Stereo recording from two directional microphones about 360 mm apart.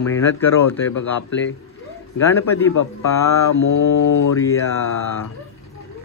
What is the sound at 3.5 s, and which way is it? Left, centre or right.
Mantra, left.